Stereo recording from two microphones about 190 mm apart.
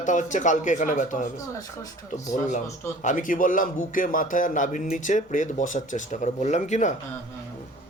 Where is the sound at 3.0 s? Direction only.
45° left (ahead or behind).